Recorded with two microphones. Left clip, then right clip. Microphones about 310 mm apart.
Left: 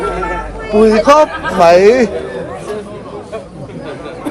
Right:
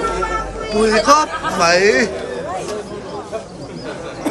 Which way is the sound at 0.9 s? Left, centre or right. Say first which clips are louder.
Left 4 dB; centre.